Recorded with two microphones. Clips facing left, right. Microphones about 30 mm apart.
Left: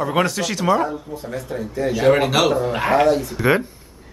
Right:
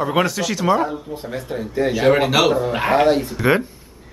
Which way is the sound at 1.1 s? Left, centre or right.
Right.